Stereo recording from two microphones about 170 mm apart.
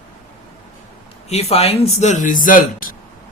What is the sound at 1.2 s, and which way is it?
Speech, 35° left (ahead or behind).